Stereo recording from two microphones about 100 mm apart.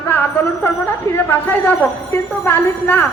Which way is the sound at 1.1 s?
20° left (ahead or behind).